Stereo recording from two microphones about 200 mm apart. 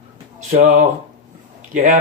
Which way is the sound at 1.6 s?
40° right (ahead or behind).